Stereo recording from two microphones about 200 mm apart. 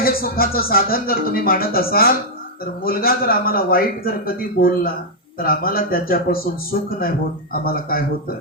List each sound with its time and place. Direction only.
0.0 s speech: 50° left (ahead or behind)